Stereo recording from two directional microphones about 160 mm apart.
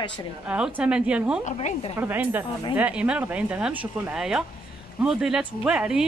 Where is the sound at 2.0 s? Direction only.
10° right (ahead or behind).